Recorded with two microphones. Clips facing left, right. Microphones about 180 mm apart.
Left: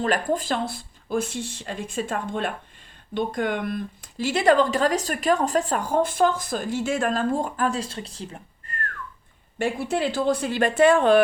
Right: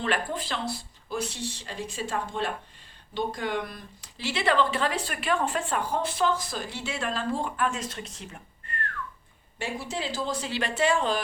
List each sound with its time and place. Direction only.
0.0 s speech: 40° left (ahead or behind)
9.6 s speech: 55° left (ahead or behind)